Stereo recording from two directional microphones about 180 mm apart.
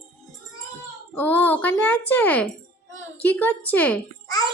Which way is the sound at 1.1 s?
10° left (ahead or behind).